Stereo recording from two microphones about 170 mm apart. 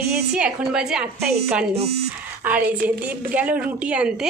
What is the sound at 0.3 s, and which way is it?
Speech, 5° right (ahead or behind).